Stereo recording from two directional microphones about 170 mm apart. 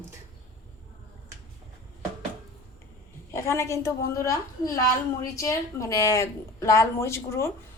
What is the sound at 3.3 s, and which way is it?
A woman's voice, 15° left (ahead or behind).